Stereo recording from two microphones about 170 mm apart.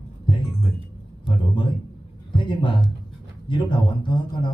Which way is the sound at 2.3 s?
30° left (ahead or behind).